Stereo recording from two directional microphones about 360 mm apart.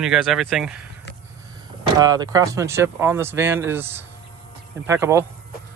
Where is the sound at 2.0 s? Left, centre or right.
Centre.